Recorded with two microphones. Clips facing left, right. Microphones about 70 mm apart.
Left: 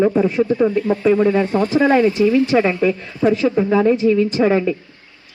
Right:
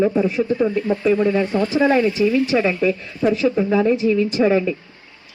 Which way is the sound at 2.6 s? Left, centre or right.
Centre.